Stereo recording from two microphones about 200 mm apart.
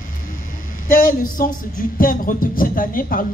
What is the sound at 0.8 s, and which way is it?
Speech, 45° left (ahead or behind).